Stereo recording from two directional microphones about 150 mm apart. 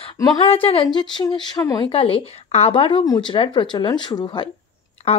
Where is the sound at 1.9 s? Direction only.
35° left (ahead or behind).